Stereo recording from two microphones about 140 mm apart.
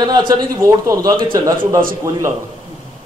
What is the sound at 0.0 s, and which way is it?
A man's voice, 30° right (ahead or behind).